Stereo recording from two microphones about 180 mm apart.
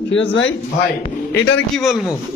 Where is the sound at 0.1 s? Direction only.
90° left.